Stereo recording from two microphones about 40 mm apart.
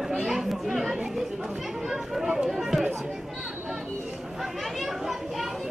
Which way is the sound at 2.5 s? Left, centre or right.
Centre.